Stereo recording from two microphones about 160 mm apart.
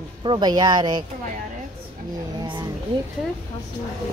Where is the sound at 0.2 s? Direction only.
25° right (ahead or behind).